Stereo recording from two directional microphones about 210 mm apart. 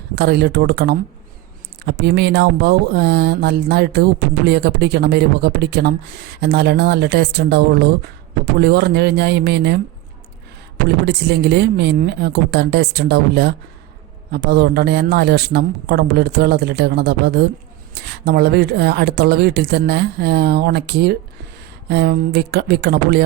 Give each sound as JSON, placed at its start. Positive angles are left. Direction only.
{"t": 0.2, "sound": "speech", "side_deg": -50}
{"t": 10.8, "sound": "speech", "side_deg": -50}